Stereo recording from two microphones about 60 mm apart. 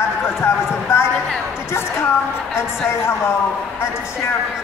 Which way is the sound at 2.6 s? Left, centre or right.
Left.